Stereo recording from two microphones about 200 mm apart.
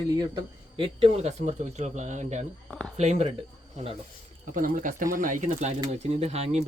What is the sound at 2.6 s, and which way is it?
Speech, 5° left (ahead or behind).